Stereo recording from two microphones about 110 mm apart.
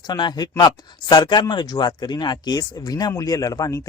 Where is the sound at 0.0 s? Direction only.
40° left (ahead or behind).